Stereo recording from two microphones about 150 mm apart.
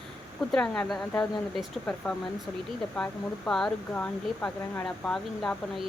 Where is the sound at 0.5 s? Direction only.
5° left (ahead or behind).